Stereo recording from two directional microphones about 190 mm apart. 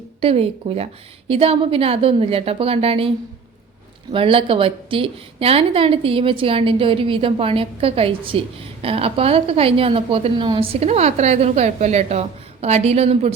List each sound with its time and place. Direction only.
0.2 s a woman's voice: 30° right (ahead or behind)
4.1 s a woman's voice: 30° right (ahead or behind)